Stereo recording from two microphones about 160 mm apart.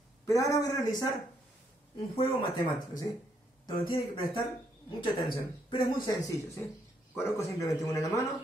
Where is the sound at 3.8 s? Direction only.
30° left (ahead or behind).